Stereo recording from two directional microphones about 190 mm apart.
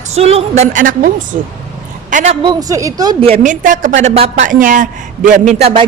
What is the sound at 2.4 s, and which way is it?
A woman's voice, 20° right (ahead or behind).